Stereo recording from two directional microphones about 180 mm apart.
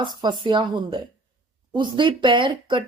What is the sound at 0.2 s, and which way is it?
Speech, 25° right (ahead or behind).